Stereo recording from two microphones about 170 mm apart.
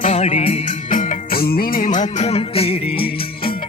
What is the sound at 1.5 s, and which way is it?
Music, 60° left (ahead or behind).